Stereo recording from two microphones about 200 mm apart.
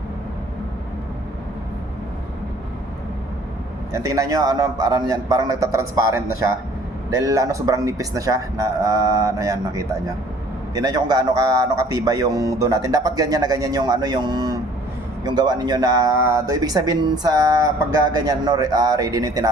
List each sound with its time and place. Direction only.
3.9 s a man's voice: 15° right (ahead or behind)